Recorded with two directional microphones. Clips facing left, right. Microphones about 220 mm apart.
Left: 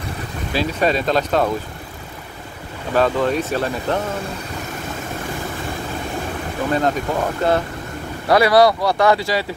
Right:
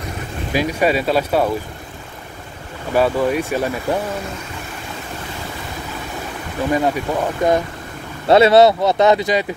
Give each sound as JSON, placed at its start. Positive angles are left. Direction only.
{"t": 0.5, "sound": "speech", "side_deg": -15}
{"t": 2.9, "sound": "speech", "side_deg": -10}
{"t": 6.7, "sound": "speech", "side_deg": -10}
{"t": 8.3, "sound": "speech", "side_deg": -25}